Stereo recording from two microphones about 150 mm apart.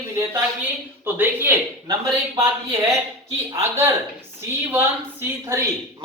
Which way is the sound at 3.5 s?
15° right (ahead or behind).